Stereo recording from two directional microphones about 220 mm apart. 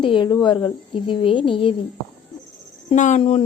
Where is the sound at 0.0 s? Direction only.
20° left (ahead or behind).